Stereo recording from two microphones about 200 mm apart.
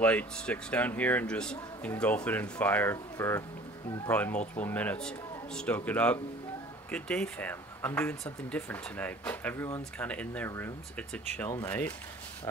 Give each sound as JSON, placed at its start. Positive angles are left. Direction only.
{"t": 0.0, "sound": "speech", "side_deg": 5}